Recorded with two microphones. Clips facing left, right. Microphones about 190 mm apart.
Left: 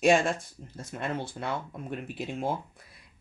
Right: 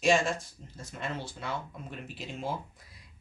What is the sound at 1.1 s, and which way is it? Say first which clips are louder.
Speech: left 4 dB; 55° left (ahead or behind).